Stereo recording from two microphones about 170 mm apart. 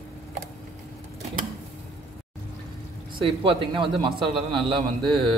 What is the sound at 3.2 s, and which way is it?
A man's voice, 30° right (ahead or behind).